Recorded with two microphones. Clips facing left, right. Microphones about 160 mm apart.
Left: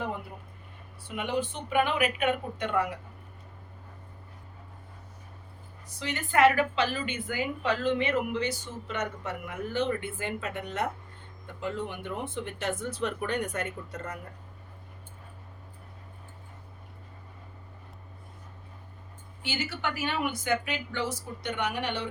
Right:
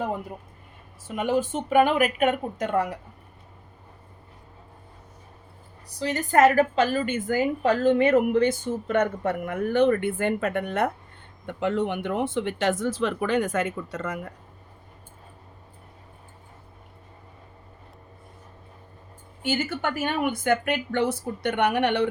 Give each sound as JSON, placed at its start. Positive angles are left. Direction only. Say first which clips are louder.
{"t": 1.0, "sound": "a woman's voice", "louder": "right 6 dB", "side_deg": -45}
{"t": 6.0, "sound": "a woman's voice", "louder": "right 4 dB", "side_deg": -40}
{"t": 11.4, "sound": "speech", "louder": "right 9 dB", "side_deg": -70}
{"t": 19.4, "sound": "a woman's voice", "louder": "right 7 dB", "side_deg": -50}